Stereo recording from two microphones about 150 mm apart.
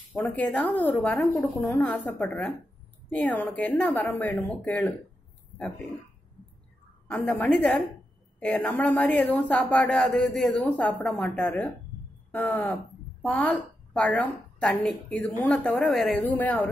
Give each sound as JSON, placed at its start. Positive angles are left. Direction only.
{"t": 0.1, "sound": "speech", "side_deg": 10}
{"t": 1.6, "sound": "speech", "side_deg": 10}
{"t": 7.1, "sound": "speech", "side_deg": 5}